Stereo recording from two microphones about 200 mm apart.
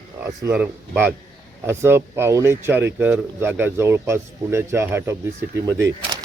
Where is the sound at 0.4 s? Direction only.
5° right (ahead or behind).